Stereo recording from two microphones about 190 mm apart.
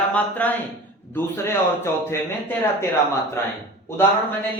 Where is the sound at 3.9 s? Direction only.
15° left (ahead or behind).